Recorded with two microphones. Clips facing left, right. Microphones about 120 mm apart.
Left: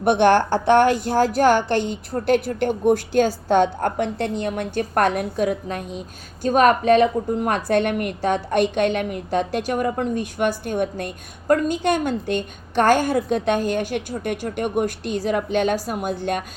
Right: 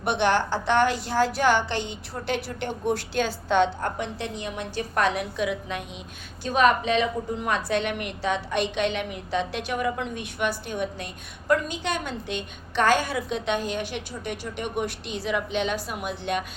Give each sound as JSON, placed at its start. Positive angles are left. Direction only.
{"t": 0.0, "sound": "a woman's voice", "side_deg": 50}